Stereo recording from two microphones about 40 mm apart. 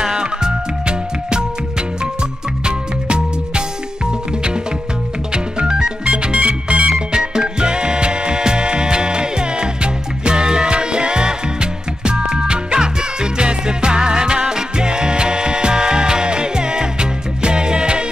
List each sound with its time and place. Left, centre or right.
0.0 s music: centre
2.6 s music: right
5.3 s music: right